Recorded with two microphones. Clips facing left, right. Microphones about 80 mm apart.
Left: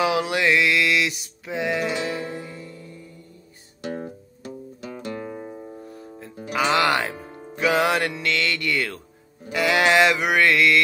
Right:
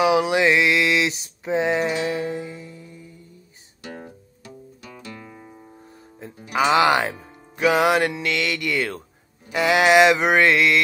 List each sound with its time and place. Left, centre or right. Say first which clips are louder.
0.0 s mantra: right 4 dB; centre
2.0 s music: right 4 dB; right
3.8 s guitar: left 6 dB; left
4.4 s music: left 7 dB; left
6.5 s music: right 3 dB; centre
9.5 s mantra: right 2 dB; right